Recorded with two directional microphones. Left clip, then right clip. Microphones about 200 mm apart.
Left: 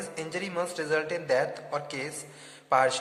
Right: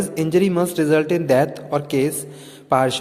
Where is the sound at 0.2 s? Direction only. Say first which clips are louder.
Right 14 dB; 35° right (ahead or behind).